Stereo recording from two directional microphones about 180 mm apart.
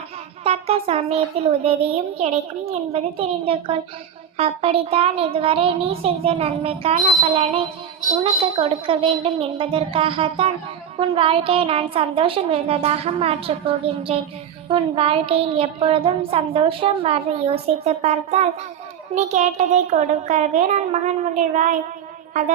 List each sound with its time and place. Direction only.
0.4 s a woman's voice: 35° right (ahead or behind)